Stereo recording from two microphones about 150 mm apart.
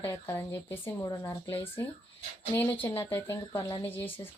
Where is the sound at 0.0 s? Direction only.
15° left (ahead or behind).